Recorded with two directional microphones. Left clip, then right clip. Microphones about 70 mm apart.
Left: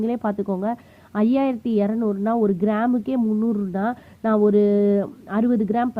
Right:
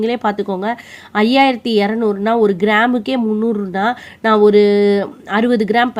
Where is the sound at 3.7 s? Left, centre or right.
Left.